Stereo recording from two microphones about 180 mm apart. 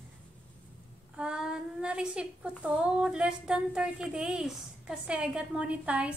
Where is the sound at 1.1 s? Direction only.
5° right (ahead or behind).